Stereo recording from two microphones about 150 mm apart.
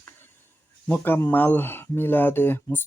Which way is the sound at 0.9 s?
15° left (ahead or behind).